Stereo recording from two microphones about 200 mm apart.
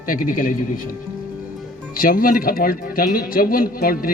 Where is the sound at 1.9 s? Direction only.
45° left (ahead or behind).